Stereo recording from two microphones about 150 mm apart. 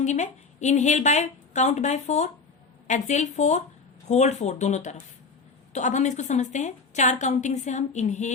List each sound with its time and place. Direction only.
0.0 s a woman's voice: 50° left (ahead or behind)